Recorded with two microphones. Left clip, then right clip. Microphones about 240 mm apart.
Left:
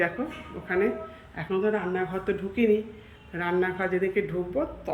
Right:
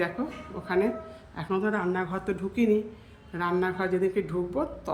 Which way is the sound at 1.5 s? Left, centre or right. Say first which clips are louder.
Left 1 dB; centre.